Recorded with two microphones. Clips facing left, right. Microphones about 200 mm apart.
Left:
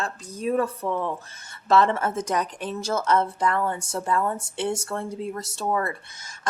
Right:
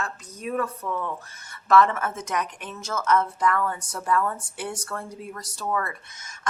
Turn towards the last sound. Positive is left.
turn(degrees=30)  # may be behind; listen again after turning